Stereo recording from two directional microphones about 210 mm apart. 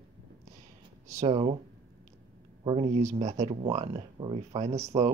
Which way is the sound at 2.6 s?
25° right (ahead or behind).